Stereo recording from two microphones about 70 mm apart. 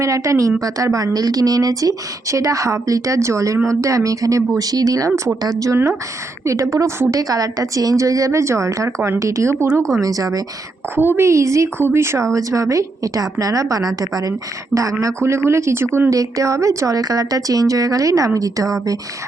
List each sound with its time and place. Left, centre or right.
0.0 s speech: right
5.4 s a woman's voice: right
6.4 s speech: right
10.9 s speech: right
11.3 s speech: right
15.4 s speech: right
16.1 s a woman's voice: right